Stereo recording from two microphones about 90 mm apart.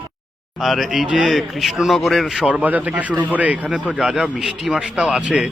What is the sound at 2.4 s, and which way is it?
Speech, 15° right (ahead or behind).